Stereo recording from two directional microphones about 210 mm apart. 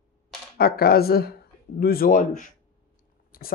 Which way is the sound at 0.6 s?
45° left (ahead or behind).